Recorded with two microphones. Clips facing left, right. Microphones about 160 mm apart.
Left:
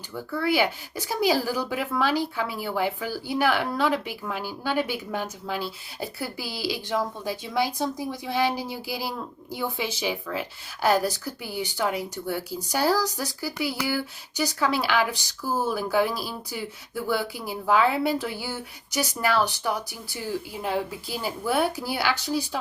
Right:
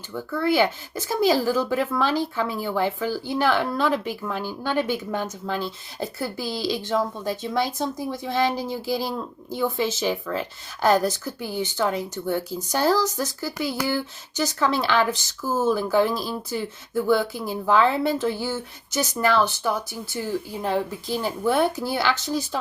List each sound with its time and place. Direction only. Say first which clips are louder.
0.4 s speech: right 3 dB; 10° left (ahead or behind)